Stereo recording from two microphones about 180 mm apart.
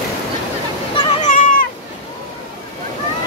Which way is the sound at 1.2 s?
45° left (ahead or behind).